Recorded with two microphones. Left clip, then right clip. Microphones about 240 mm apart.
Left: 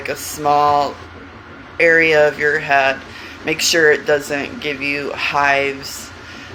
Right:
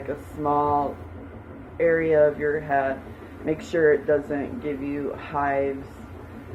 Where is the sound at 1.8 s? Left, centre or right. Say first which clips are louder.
Left 7 dB; left.